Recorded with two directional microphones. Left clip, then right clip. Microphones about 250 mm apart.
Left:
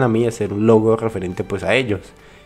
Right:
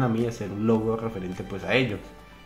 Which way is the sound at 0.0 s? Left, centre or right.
Left.